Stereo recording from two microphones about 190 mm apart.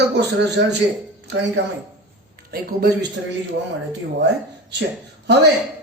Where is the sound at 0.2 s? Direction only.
60° right (ahead or behind).